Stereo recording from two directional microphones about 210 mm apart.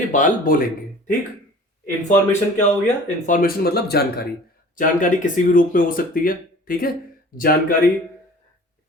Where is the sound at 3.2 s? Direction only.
40° left (ahead or behind).